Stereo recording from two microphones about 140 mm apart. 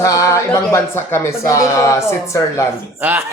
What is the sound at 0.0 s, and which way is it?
Speech, 20° left (ahead or behind).